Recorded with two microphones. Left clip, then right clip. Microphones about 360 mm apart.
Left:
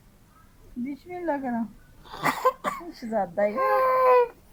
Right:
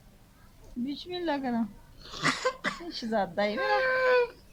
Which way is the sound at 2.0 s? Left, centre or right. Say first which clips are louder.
Left 5 dB; centre.